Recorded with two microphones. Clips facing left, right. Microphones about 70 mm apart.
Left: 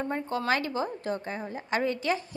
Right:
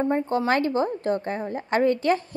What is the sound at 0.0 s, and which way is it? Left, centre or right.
Speech, right.